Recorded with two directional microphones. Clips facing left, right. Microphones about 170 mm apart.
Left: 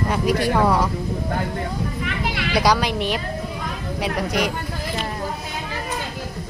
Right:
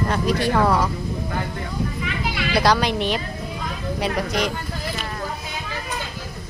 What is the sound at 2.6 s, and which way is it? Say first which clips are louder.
A woman's voice: even; 10° left (ahead or behind).